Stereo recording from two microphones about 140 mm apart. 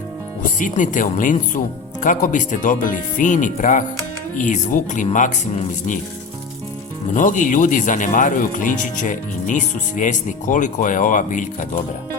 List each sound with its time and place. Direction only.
0.6 s speech: 65° left (ahead or behind)
7.1 s speech: 65° left (ahead or behind)